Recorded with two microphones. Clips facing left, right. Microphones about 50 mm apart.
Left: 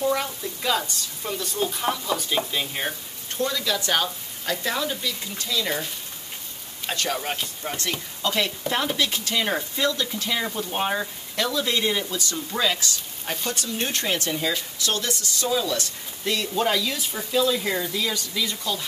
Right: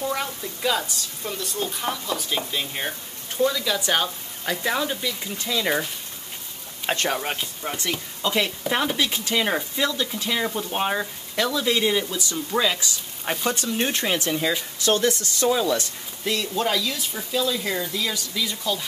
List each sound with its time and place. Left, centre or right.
0.0 s a woman's voice: centre
7.1 s speech: centre
13.2 s speech: right
14.8 s speech: right
16.3 s a woman's voice: centre